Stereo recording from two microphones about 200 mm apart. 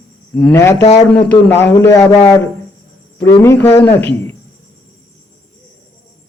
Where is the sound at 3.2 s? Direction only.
15° left (ahead or behind).